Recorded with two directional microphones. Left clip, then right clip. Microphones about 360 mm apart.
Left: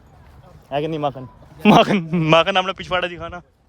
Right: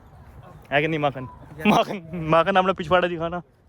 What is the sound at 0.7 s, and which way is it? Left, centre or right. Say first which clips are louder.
Speech: even; centre.